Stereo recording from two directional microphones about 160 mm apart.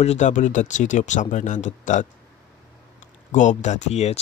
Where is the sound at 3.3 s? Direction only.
50° left (ahead or behind).